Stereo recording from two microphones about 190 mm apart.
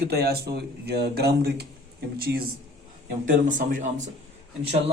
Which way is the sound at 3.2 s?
45° right (ahead or behind).